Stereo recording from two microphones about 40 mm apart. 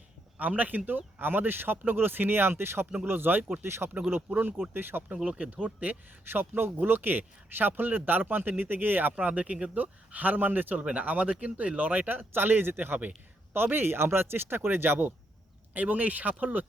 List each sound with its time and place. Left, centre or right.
0.3 s speech: right
0.9 s speech: right
3.1 s speech: right
5.0 s speech: right
6.2 s speech: right
9.1 s speech: right
10.8 s speech: right
12.0 s speech: right
13.5 s speech: right
15.7 s speech: right